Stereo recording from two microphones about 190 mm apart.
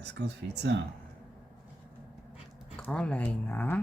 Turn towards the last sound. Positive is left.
turn(degrees=10)  # may be behind; listen again after turning